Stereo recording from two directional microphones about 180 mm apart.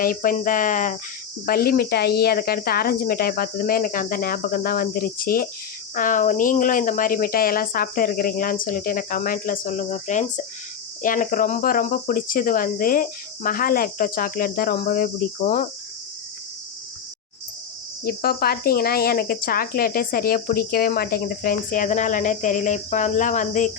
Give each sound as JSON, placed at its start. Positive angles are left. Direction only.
{"t": 0.0, "sound": "speech", "side_deg": 50}
{"t": 1.5, "sound": "speech", "side_deg": 55}
{"t": 18.0, "sound": "speech", "side_deg": 55}